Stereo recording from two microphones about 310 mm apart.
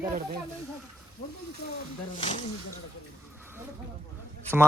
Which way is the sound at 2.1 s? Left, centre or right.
Left.